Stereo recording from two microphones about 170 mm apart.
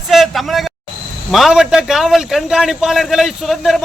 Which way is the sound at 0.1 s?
Centre (ahead or behind).